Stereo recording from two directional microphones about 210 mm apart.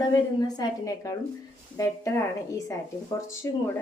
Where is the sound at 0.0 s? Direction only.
20° left (ahead or behind).